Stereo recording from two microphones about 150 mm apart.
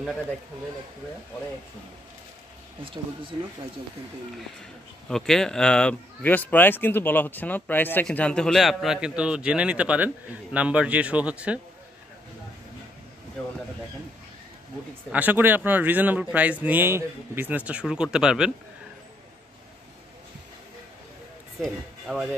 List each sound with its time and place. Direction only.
2.8 s speech: 35° right (ahead or behind)
5.0 s speech: 5° left (ahead or behind)
15.0 s speech: 10° right (ahead or behind)
21.5 s speech: centre (ahead or behind)